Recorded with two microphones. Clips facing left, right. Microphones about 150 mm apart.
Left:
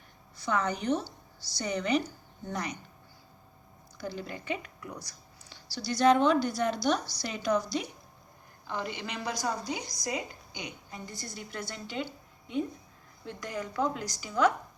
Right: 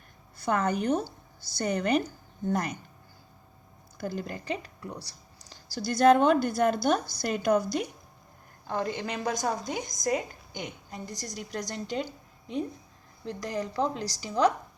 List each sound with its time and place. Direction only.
0.3 s a woman's voice: 50° right (ahead or behind)
3.9 s a woman's voice: 50° right (ahead or behind)